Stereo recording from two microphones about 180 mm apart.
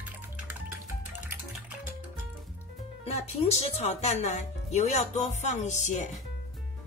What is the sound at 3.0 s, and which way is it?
Speech, 40° left (ahead or behind).